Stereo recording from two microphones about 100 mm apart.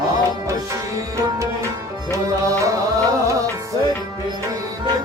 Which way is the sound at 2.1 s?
30° right (ahead or behind).